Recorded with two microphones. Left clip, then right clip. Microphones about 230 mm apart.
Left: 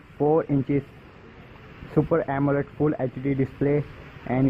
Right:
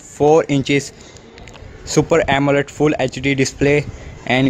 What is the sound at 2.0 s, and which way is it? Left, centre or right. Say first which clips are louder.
Speech: right 9 dB; right.